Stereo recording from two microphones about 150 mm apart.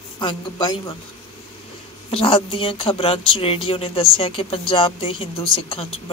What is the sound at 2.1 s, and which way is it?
Speech, 35° left (ahead or behind).